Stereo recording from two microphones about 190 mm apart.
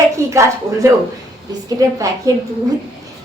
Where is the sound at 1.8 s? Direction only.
20° right (ahead or behind).